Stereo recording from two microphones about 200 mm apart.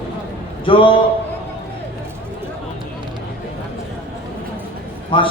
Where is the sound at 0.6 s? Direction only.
25° left (ahead or behind).